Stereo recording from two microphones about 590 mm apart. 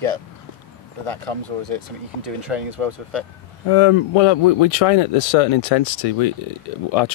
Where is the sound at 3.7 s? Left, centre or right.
Left.